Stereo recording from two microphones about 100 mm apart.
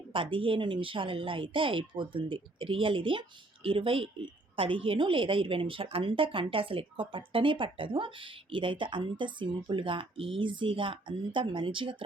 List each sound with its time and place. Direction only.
0.1 s a woman's voice: 60° right (ahead or behind)